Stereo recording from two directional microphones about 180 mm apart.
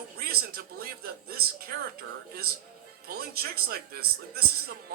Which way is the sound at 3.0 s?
60° right (ahead or behind).